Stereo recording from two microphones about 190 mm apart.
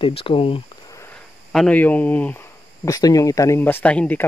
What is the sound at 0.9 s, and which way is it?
Speech, 10° left (ahead or behind).